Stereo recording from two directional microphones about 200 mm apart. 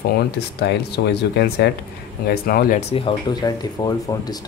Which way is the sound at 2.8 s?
25° left (ahead or behind).